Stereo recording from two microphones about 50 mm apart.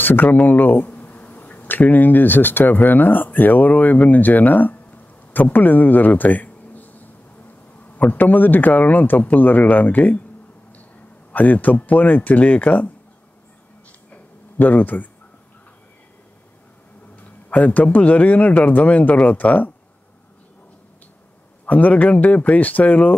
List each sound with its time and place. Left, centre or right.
0.0 s speech: left
8.1 s speech: left
11.3 s speech: left
14.6 s speech: left
17.2 s speech: left
21.6 s speech: left